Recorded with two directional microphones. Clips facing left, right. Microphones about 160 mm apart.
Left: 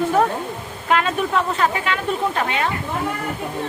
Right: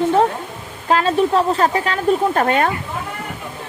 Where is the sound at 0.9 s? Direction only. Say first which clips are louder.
Right 4 dB; 30° right (ahead or behind).